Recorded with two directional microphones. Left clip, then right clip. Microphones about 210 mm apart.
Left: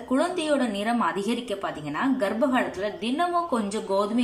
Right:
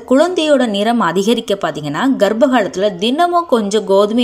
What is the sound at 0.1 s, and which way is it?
Speech, 35° right (ahead or behind).